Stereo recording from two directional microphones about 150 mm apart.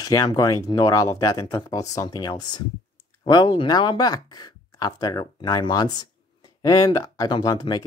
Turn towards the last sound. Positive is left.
turn(degrees=25)  # may be behind; listen again after turning